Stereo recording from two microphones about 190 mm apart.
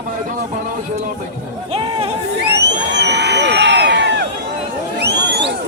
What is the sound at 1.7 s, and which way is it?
Speech, 30° right (ahead or behind).